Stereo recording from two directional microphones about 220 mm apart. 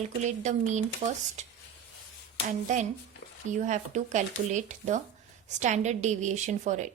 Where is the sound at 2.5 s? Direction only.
35° right (ahead or behind).